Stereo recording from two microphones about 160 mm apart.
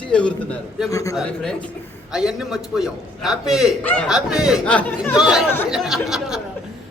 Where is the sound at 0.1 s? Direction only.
5° left (ahead or behind).